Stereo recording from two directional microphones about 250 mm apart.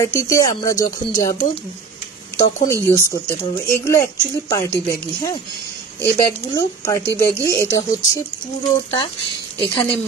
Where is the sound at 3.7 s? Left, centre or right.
Centre.